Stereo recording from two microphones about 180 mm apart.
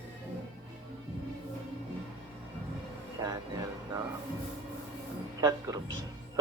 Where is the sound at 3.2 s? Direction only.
20° right (ahead or behind).